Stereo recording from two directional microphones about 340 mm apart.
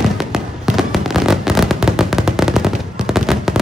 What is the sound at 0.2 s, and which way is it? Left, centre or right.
Fireworks, centre.